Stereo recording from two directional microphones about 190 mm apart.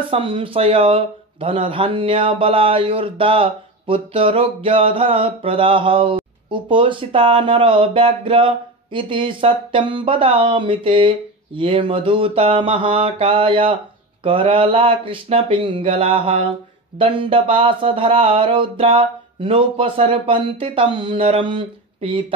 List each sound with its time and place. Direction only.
0.1 s speech: 25° right (ahead or behind)